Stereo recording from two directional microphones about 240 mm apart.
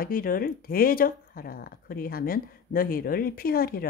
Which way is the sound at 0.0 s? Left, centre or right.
Left.